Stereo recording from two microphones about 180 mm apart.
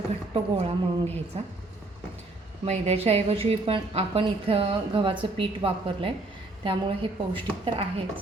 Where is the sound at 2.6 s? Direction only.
35° right (ahead or behind).